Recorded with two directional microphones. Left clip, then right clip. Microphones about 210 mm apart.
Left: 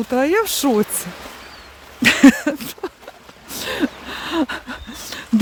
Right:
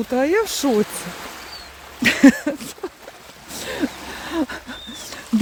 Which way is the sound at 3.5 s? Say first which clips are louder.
Left 3 dB; 20° left (ahead or behind).